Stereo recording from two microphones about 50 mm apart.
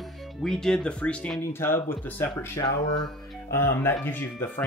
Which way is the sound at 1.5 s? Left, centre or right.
Left.